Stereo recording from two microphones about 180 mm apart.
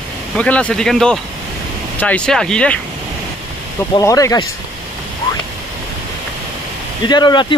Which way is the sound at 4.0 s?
20° left (ahead or behind).